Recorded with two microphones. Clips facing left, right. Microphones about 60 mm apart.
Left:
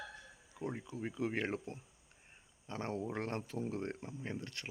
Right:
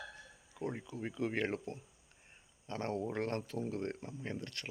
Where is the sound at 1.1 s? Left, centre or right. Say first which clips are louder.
Right 2 dB; centre.